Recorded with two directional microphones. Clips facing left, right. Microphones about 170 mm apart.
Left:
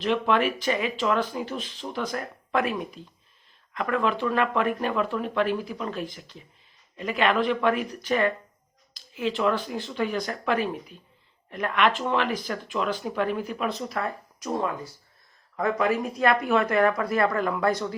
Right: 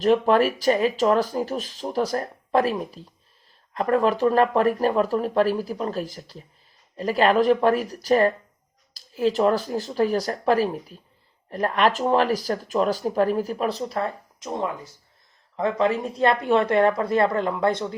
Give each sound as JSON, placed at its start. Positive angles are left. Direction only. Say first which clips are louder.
{"t": 0.0, "sound": "speech", "louder": "right 5 dB", "side_deg": -40}